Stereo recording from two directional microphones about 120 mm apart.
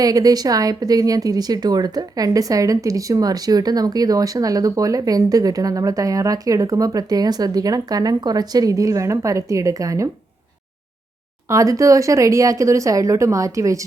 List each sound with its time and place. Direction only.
0.0 s speech: 30° right (ahead or behind)
11.4 s speech: 25° right (ahead or behind)